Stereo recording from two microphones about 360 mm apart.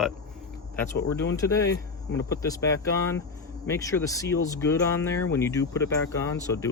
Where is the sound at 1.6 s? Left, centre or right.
Left.